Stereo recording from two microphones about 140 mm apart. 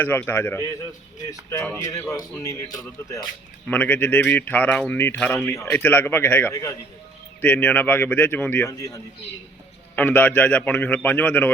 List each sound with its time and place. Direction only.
0.0 s speech: 15° left (ahead or behind)
3.7 s speech: 10° left (ahead or behind)
6.5 s speech: 25° left (ahead or behind)
7.4 s speech: 10° left (ahead or behind)
8.6 s speech: 25° left (ahead or behind)
9.9 s speech: 10° left (ahead or behind)